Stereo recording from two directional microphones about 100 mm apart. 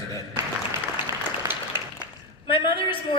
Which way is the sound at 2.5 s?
60° left (ahead or behind).